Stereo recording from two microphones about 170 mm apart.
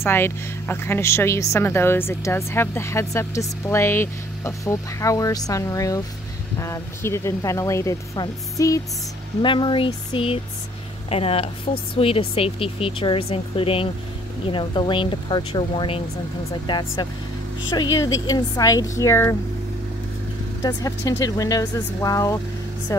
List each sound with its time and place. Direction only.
0.0 s a woman's voice: 15° left (ahead or behind)
20.6 s a woman's voice: 20° left (ahead or behind)